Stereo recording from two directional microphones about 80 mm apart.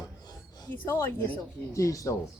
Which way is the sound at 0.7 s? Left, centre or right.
Left.